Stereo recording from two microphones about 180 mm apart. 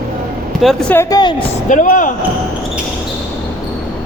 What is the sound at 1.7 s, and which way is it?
Speech, 45° left (ahead or behind).